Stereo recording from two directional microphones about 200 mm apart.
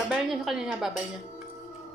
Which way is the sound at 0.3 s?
Centre (ahead or behind).